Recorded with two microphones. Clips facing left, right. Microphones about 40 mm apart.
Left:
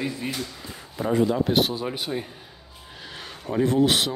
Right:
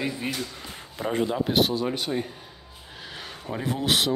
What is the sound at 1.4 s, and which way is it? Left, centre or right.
Speech, centre.